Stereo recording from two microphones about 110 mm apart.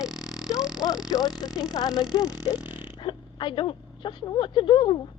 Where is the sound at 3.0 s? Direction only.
50° left (ahead or behind).